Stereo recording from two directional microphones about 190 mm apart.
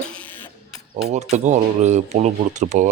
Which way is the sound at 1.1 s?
40° right (ahead or behind).